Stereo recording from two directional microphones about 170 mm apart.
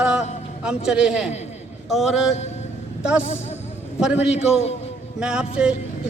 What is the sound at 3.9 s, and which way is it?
Speech, 5° right (ahead or behind).